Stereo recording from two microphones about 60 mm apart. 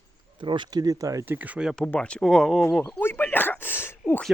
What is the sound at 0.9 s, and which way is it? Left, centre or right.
Speech, right.